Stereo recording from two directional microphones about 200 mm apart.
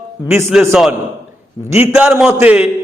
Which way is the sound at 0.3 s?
10° right (ahead or behind).